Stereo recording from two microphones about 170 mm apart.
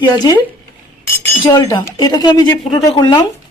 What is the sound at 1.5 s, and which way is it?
Speech, 20° left (ahead or behind).